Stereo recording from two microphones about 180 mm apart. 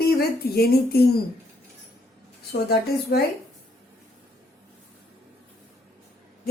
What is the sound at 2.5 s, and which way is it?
Speech, 60° left (ahead or behind).